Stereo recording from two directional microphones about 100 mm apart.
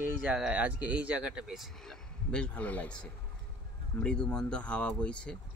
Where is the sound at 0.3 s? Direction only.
10° right (ahead or behind); by 5.4 s 10° left (ahead or behind).